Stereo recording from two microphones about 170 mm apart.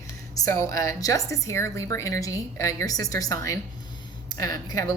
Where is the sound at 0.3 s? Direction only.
20° left (ahead or behind).